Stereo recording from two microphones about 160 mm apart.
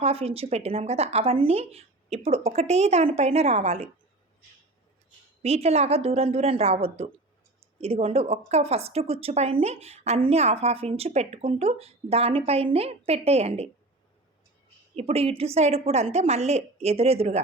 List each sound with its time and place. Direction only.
0.0 s a woman's voice: 40° right (ahead or behind)
5.4 s a woman's voice: 40° right (ahead or behind)
14.9 s a woman's voice: 40° right (ahead or behind)